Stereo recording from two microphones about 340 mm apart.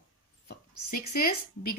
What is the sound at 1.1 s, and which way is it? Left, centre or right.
Speech, left.